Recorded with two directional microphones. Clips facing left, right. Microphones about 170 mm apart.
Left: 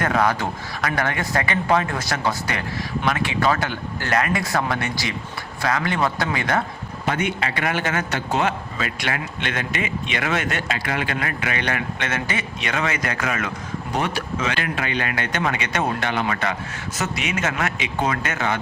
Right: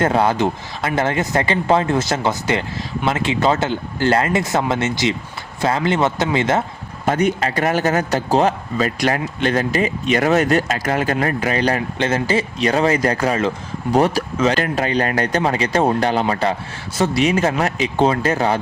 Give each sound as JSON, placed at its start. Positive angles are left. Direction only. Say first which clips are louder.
{"t": 0.0, "sound": "speech", "louder": "right 5 dB", "side_deg": -30}
{"t": 7.0, "sound": "a man's voice", "louder": "right 6 dB", "side_deg": -40}